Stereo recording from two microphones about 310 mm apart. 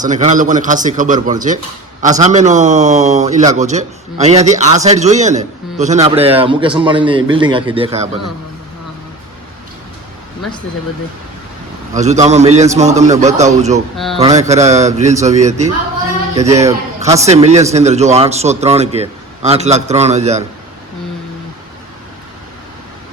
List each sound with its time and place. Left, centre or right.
0.0 s speech: right
11.9 s speech: right
13.9 s speech: centre
14.2 s mantra: centre
14.8 s speech: right